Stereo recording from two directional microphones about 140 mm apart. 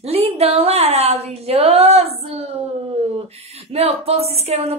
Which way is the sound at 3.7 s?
45° right (ahead or behind).